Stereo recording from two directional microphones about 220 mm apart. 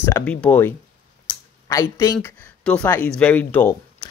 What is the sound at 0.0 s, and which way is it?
Speech, 10° left (ahead or behind).